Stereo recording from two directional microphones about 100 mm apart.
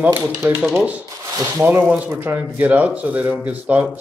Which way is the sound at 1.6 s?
15° right (ahead or behind).